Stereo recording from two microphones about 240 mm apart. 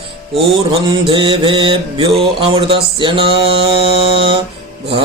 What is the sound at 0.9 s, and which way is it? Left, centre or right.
Mantra, right.